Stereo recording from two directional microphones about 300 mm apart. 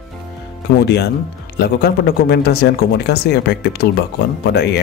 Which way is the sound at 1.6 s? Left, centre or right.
Left.